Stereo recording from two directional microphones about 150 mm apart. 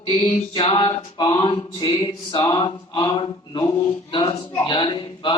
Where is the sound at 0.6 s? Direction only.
35° left (ahead or behind).